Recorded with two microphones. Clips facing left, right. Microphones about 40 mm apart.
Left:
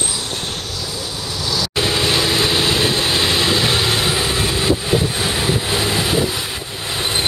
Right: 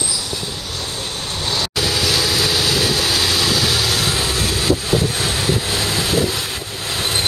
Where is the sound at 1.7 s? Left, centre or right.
Left.